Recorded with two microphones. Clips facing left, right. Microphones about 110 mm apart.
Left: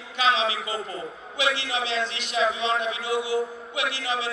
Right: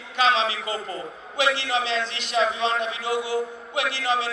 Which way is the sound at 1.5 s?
35° right (ahead or behind).